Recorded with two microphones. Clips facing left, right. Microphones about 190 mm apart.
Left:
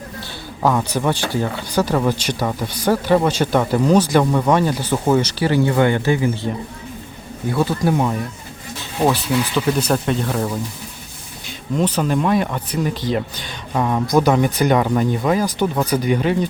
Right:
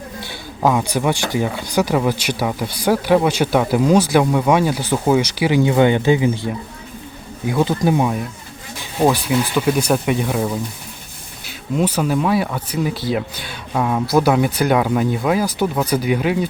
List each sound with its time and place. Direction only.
0.2 s speech: 10° right (ahead or behind)